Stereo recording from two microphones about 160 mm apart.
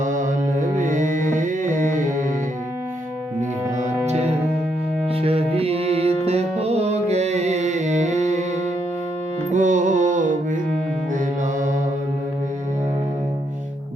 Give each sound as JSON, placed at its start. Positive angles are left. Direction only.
{"t": 0.0, "sound": "music", "side_deg": -50}
{"t": 4.0, "sound": "music", "side_deg": -45}
{"t": 9.5, "sound": "music", "side_deg": -50}